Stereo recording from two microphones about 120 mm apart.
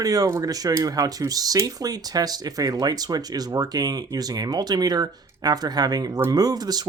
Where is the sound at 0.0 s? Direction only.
30° right (ahead or behind).